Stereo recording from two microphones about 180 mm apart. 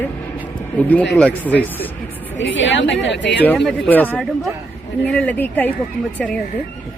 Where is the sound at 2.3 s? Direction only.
90° left.